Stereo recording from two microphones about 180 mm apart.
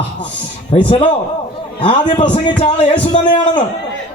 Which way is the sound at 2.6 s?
25° left (ahead or behind).